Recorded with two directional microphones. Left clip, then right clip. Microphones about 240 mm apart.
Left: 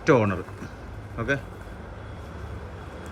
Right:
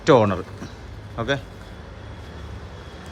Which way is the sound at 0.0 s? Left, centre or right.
Centre.